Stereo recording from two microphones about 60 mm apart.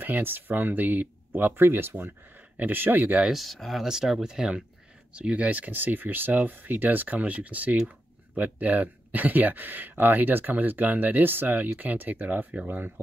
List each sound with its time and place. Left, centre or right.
0.0 s speech: right
3.3 s speech: centre; by 13.0 s right